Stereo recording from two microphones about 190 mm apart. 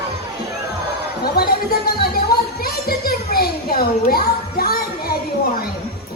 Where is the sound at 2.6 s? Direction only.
50° left (ahead or behind).